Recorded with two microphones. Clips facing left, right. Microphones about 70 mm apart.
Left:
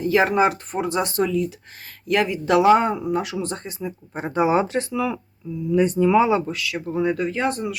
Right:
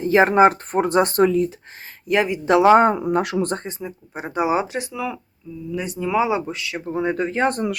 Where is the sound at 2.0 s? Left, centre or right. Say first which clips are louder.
Right 1 dB; right.